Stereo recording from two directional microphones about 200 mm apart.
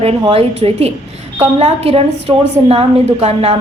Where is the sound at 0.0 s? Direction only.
30° right (ahead or behind).